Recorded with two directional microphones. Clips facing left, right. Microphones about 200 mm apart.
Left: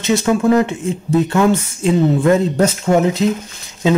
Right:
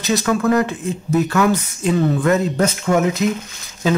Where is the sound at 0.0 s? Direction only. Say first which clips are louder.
Left 3 dB; 25° left (ahead or behind).